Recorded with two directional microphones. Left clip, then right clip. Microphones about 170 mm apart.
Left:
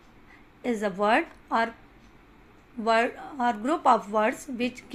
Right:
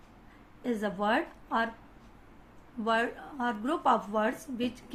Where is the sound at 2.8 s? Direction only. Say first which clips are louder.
Left 5 dB; 30° left (ahead or behind).